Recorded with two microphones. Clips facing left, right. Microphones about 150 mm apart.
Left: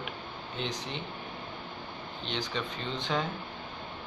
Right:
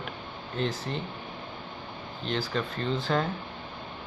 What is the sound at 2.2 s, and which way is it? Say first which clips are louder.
Speech: right 5 dB; 5° right (ahead or behind).